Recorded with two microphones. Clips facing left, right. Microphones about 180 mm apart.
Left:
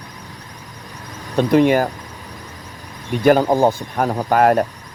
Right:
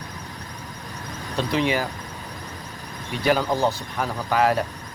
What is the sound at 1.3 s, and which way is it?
Speech, 50° left (ahead or behind).